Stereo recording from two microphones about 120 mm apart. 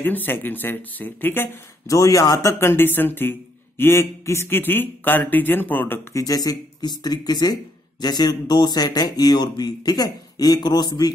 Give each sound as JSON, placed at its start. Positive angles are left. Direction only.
{"t": 0.0, "sound": "speech", "side_deg": 15}
{"t": 6.1, "sound": "speech", "side_deg": 30}